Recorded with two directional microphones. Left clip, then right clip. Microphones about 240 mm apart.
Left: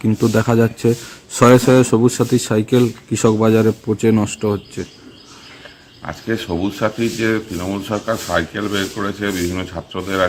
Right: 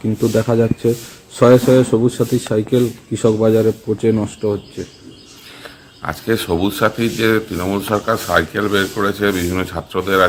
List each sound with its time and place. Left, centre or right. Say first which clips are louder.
0.2 s speech: right 1 dB; left
6.0 s speech: right 4 dB; centre